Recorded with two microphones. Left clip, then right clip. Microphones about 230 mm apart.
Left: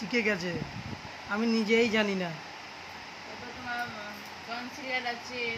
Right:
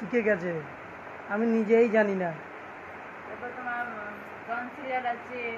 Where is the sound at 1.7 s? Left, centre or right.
Left.